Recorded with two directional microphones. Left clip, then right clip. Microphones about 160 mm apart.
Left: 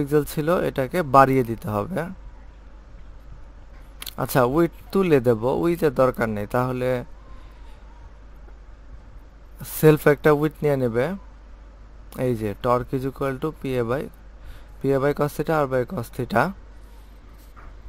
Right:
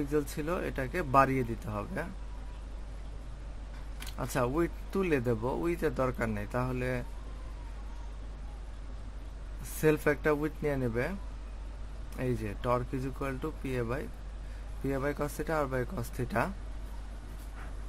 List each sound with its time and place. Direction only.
0.1 s speech: 65° left (ahead or behind)
4.0 s speech: 65° left (ahead or behind)
9.8 s speech: 65° left (ahead or behind)
12.2 s speech: 70° left (ahead or behind)